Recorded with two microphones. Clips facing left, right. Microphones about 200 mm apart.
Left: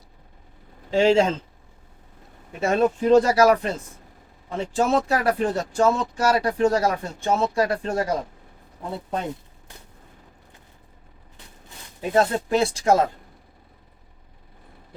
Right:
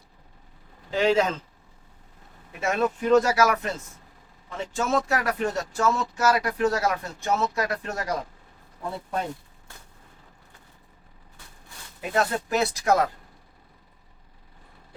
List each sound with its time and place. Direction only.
0.9 s speech: 30° left (ahead or behind)
2.5 s speech: 30° left (ahead or behind)
11.9 s speech: 30° left (ahead or behind)